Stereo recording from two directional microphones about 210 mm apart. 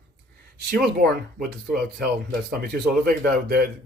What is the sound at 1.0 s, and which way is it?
Speech, 40° right (ahead or behind).